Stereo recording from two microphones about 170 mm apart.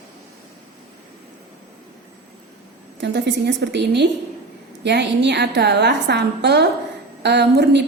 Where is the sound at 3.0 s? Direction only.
90° right.